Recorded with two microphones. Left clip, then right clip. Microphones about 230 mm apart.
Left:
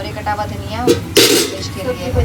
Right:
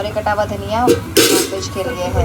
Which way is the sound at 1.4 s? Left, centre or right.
Centre.